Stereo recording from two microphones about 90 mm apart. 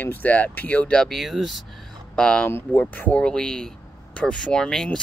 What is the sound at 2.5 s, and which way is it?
Speech, 25° left (ahead or behind).